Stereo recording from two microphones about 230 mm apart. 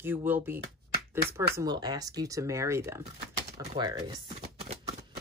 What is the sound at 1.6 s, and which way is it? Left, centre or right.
Speech, centre.